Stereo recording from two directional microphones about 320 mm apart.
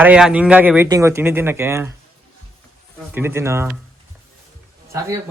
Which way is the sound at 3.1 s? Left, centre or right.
Centre.